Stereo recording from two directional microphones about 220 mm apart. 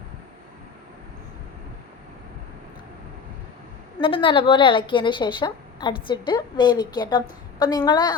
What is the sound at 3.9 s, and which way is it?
A woman's voice, 25° left (ahead or behind).